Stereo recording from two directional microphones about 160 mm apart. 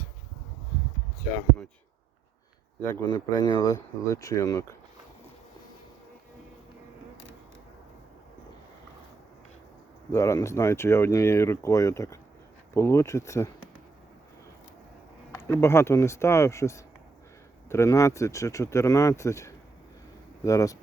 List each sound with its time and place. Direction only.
2.8 s speech: 20° left (ahead or behind)
10.1 s speech: 20° left (ahead or behind)
15.4 s speech: 15° left (ahead or behind)